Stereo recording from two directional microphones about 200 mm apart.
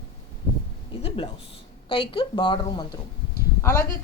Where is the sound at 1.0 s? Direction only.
30° left (ahead or behind).